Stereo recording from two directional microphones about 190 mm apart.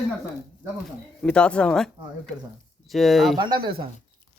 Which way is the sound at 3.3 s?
25° right (ahead or behind).